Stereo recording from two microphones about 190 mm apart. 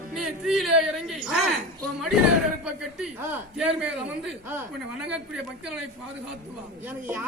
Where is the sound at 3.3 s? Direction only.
5° right (ahead or behind).